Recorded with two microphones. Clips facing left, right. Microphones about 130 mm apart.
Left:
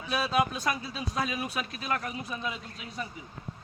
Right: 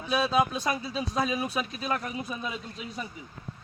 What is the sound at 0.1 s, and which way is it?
A man's voice, 25° right (ahead or behind).